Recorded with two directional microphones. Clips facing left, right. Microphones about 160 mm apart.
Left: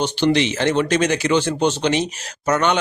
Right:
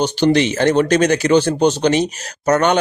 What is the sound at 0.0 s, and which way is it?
A man's voice, 45° right (ahead or behind).